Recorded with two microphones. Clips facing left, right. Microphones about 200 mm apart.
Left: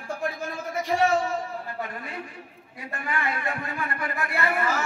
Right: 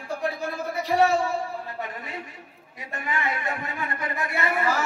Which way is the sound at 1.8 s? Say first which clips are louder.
Even; 20° right (ahead or behind).